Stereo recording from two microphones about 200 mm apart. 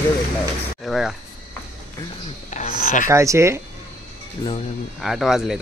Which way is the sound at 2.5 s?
40° left (ahead or behind).